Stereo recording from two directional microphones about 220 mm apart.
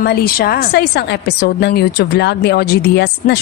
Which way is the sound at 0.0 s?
45° left (ahead or behind).